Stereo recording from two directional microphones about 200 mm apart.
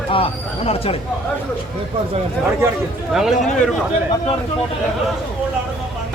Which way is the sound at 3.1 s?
Centre (ahead or behind).